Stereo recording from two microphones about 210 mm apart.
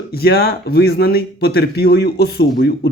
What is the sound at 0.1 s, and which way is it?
Speech, 45° left (ahead or behind).